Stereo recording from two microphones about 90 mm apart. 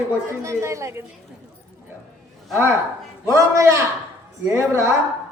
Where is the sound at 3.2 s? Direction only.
35° right (ahead or behind).